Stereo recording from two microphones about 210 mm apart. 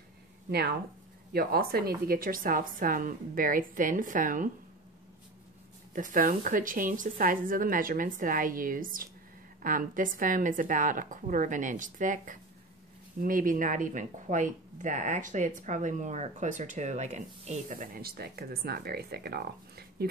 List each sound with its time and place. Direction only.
0.5 s speech: 50° right (ahead or behind)
5.9 s speech: 40° right (ahead or behind)